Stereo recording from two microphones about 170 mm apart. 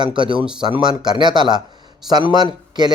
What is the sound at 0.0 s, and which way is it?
A man's voice, 30° right (ahead or behind).